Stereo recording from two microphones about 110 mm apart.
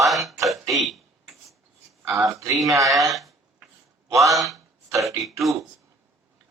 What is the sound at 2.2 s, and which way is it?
Speech, 30° right (ahead or behind).